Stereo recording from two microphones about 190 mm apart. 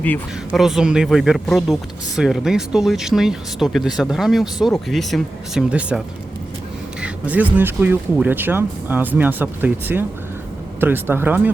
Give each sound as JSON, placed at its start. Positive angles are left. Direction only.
{"t": 0.0, "sound": "a woman's voice", "side_deg": 10}
{"t": 0.6, "sound": "speech", "side_deg": 0}
{"t": 7.0, "sound": "speech", "side_deg": -10}